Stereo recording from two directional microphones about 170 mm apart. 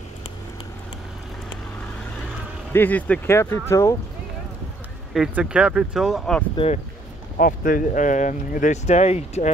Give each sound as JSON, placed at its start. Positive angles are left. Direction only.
{"t": 2.7, "sound": "speech", "side_deg": 10}
{"t": 5.1, "sound": "speech", "side_deg": -5}
{"t": 6.5, "sound": "speech", "side_deg": 35}
{"t": 7.3, "sound": "speech", "side_deg": 55}